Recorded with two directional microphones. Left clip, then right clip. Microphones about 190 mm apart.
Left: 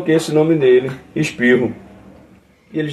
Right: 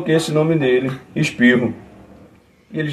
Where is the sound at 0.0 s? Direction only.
10° left (ahead or behind).